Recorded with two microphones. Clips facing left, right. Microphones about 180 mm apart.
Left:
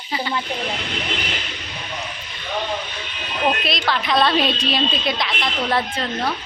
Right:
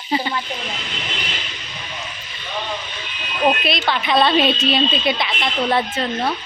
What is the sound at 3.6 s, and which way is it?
Speech, centre (ahead or behind).